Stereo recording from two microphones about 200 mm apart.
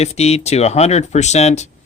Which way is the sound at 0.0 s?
30° left (ahead or behind).